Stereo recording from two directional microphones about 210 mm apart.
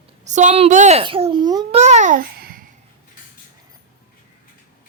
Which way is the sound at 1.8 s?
35° right (ahead or behind).